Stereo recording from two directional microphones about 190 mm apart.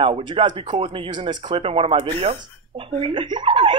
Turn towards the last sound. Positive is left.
turn(degrees=-25)  # may be behind; listen again after turning